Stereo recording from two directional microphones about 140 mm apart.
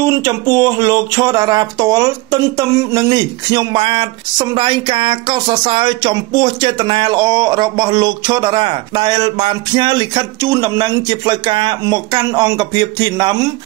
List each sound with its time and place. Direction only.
0.0 s speech: 25° right (ahead or behind)